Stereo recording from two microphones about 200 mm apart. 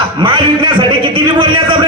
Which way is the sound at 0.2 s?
25° right (ahead or behind).